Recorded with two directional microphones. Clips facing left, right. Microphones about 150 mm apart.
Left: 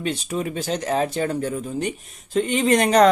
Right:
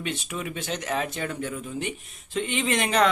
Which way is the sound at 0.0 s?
35° left (ahead or behind).